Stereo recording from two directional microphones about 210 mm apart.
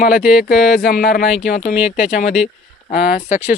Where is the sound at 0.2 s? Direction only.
Centre (ahead or behind).